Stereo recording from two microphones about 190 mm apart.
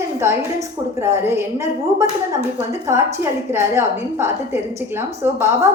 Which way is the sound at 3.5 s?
10° right (ahead or behind).